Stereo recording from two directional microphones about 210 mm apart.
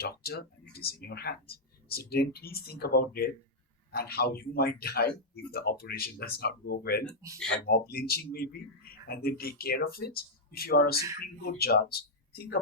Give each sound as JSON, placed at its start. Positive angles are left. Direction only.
{"t": 0.0, "sound": "speech", "side_deg": 45}